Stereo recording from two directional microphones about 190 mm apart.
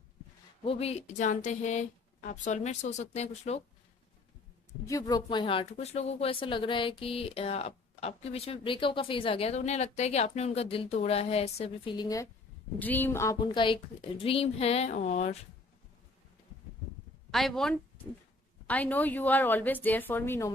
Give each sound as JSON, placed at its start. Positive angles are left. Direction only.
{"t": 0.7, "sound": "speech", "side_deg": 30}
{"t": 4.8, "sound": "speech", "side_deg": 20}
{"t": 12.7, "sound": "a woman's voice", "side_deg": 10}
{"t": 17.3, "sound": "a woman's voice", "side_deg": 0}